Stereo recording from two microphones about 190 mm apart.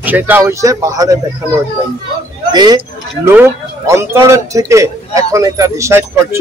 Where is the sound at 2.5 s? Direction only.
20° right (ahead or behind).